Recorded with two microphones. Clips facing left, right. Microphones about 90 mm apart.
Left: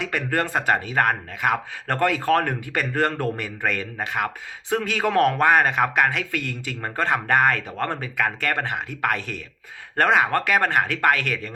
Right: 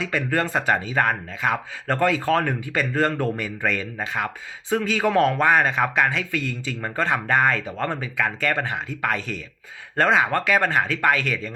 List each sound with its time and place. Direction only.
0.0 s speech: 60° left (ahead or behind)
6.8 s speech: 50° left (ahead or behind)